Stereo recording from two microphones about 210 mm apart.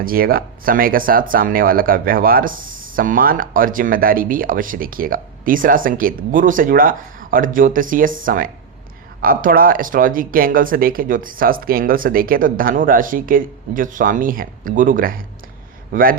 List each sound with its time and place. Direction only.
0.0 s speech: 45° right (ahead or behind)